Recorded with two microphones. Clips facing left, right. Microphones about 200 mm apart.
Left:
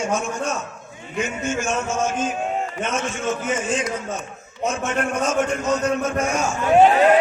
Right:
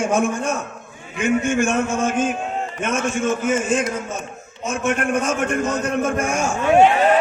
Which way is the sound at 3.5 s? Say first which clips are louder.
Right 4 dB; 50° right (ahead or behind).